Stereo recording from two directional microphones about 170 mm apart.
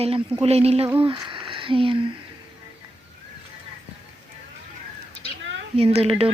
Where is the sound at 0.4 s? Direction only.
35° right (ahead or behind).